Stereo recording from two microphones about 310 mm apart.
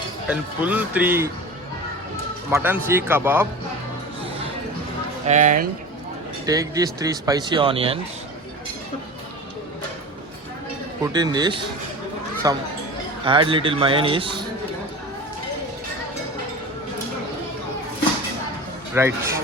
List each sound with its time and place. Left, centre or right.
0.3 s speech: centre
2.5 s speech: centre
5.2 s speech: right
6.4 s speech: centre
11.0 s speech: centre
18.9 s speech: centre